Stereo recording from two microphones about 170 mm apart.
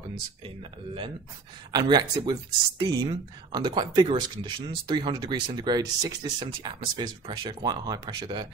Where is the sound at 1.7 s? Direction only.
25° right (ahead or behind).